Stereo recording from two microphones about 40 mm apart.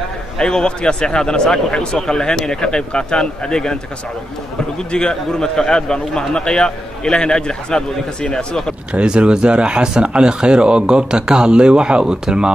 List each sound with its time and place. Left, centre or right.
0.4 s a man's voice: left
4.9 s a man's voice: centre
8.9 s speech: right